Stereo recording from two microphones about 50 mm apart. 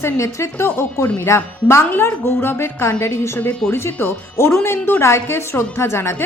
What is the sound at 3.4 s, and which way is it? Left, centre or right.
Speech, left.